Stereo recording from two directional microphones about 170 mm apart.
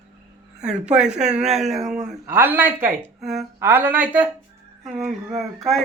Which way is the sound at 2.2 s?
15° right (ahead or behind).